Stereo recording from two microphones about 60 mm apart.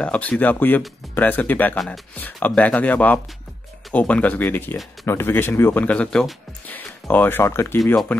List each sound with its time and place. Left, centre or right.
0.0 s speech: left
5.8 s speech: centre
6.7 s speech: left
7.4 s speech: left
7.8 s speech: centre